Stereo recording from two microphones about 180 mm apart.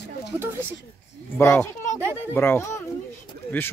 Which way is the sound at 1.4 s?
15° left (ahead or behind).